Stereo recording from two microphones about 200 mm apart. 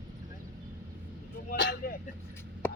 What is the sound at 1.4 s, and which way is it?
Vehicle, 50° left (ahead or behind).